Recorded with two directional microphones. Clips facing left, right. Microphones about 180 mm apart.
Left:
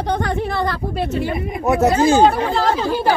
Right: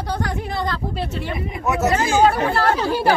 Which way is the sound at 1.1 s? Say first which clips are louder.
Left 5 dB; 45° left (ahead or behind).